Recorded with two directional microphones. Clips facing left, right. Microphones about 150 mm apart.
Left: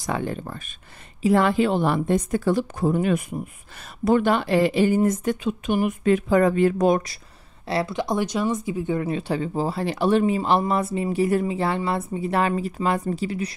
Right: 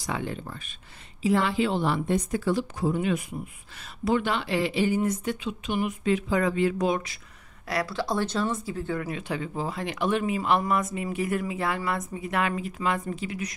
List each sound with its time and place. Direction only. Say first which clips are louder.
0.0 s a woman's voice: left 5 dB; 45° left (ahead or behind)
7.6 s speech: left 4 dB; 25° left (ahead or behind)